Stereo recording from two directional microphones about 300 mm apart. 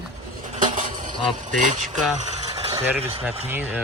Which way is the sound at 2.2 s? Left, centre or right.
Right.